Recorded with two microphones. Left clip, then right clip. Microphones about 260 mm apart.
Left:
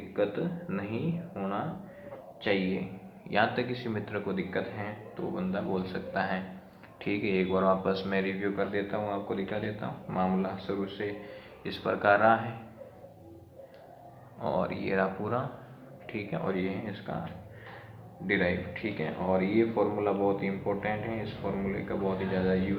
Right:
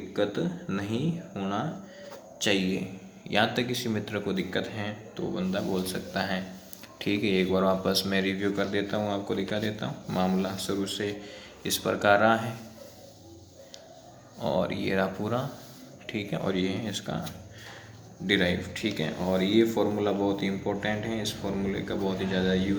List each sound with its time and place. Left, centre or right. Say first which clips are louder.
0.1 s speech: right 1 dB; right
3.2 s speech: right 2 dB; right
14.4 s speech: right 3 dB; right
18.3 s speech: right 3 dB; right